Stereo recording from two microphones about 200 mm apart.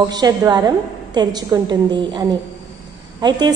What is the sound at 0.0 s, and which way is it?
A woman's voice, 20° right (ahead or behind).